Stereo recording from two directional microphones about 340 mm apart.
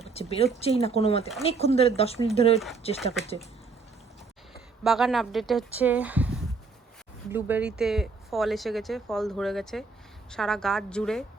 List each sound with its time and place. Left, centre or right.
0.0 s speech: centre
4.8 s speech: centre